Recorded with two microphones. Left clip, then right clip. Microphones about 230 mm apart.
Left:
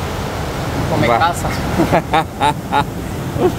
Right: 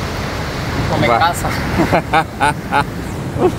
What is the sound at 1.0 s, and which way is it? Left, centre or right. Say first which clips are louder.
Speech: right 1 dB; centre.